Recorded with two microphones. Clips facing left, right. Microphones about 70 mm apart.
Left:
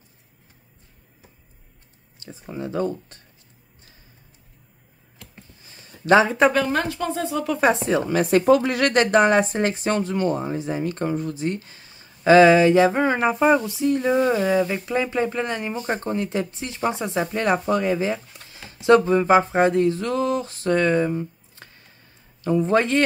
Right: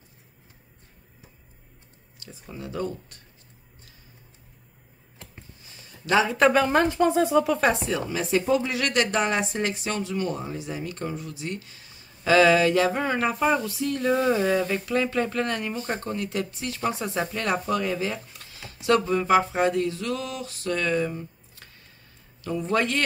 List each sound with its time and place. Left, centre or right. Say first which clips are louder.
2.1 s speech: left 7 dB; left
5.7 s a sound: left 8 dB; left
6.5 s speech: right 1 dB; centre
7.2 s speech: right 4 dB; centre
7.6 s speech: left 4 dB; left
8.1 s speech: left 7 dB; left
14.1 s speech: even; centre; by 23.0 s left